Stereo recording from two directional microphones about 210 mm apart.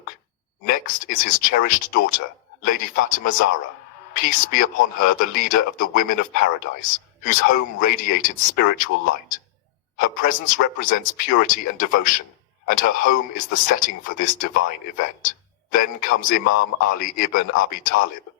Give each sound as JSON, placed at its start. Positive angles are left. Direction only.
{"t": 0.7, "sound": "a man's voice", "side_deg": 40}
{"t": 10.0, "sound": "a man's voice", "side_deg": 40}